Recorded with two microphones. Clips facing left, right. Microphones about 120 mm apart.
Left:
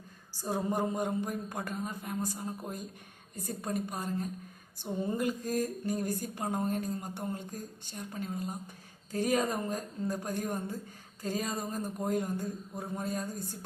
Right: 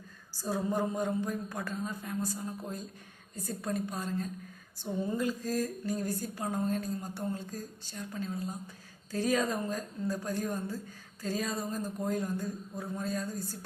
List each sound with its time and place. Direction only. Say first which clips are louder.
0.4 s a man's voice: even; 15° left (ahead or behind)